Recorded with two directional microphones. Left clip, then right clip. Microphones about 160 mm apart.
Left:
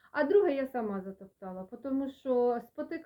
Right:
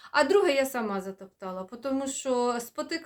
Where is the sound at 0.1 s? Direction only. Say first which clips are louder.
Right 4 dB; 20° right (ahead or behind).